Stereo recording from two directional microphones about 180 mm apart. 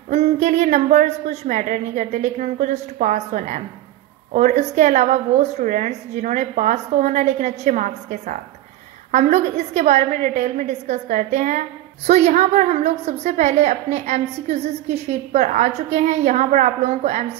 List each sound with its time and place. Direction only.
0.1 s a woman's voice: 40° right (ahead or behind)